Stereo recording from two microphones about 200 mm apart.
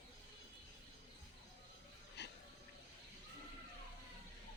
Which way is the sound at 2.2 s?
60° left (ahead or behind).